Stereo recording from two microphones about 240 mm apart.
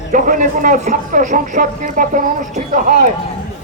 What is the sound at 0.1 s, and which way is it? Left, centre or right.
Speech, right.